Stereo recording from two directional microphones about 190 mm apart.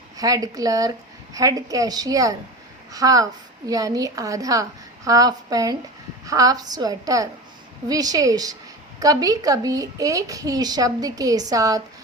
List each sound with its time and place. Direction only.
0.2 s a woman's voice: 20° right (ahead or behind)